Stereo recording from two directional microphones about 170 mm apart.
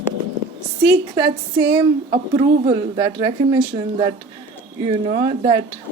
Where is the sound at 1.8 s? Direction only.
25° right (ahead or behind).